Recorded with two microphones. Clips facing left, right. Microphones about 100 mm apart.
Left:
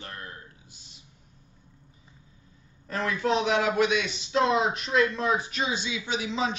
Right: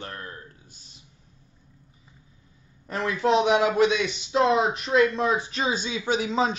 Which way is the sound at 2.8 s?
25° right (ahead or behind).